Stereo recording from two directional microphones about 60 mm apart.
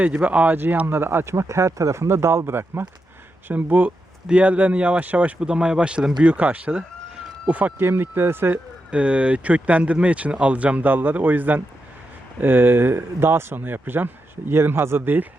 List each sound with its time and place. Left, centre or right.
0.0 s speech: right
0.6 s speech: right
3.5 s speech: right
7.8 s speech: right
8.9 s speech: centre; by 15.3 s right